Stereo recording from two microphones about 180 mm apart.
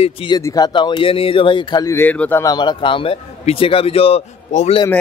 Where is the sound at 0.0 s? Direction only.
30° left (ahead or behind); by 2.4 s 10° left (ahead or behind).